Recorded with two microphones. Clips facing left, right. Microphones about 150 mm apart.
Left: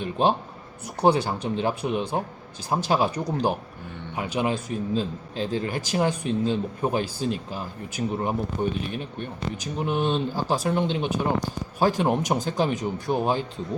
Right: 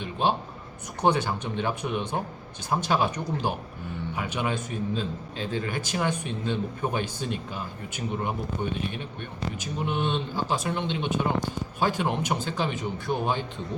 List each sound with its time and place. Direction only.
0.0 s a man's voice: 45° left (ahead or behind)